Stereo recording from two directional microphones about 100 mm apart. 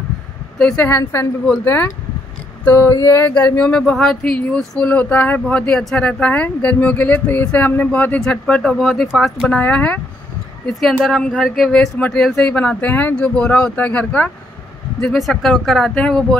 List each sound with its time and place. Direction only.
0.6 s speech: 5° left (ahead or behind)
2.6 s a sound: 20° left (ahead or behind)
3.5 s speech: 10° left (ahead or behind)
9.5 s speech: 15° left (ahead or behind)
10.7 s speech: centre (ahead or behind)
15.1 s speech: centre (ahead or behind)